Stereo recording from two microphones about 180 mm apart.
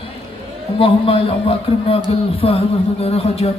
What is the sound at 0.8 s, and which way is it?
A man's voice, 30° left (ahead or behind).